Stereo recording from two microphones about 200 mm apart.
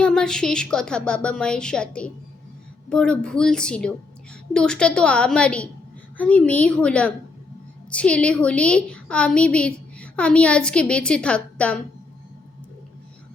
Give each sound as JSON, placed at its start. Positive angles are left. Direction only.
{"t": 0.0, "sound": "a woman's voice", "side_deg": 5}